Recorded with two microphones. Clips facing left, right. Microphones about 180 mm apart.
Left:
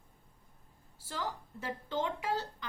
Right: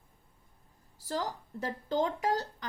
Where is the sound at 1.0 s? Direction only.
40° right (ahead or behind).